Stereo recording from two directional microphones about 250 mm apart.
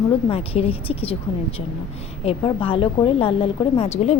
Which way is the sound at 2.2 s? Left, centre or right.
Centre.